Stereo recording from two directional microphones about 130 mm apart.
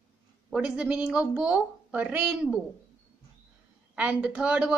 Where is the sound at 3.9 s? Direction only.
10° right (ahead or behind).